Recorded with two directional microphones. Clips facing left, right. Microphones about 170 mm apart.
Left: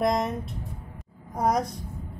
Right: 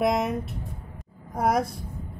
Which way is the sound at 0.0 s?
5° right (ahead or behind).